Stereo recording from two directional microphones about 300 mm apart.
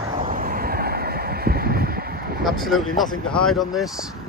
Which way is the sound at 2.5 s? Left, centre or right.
Centre.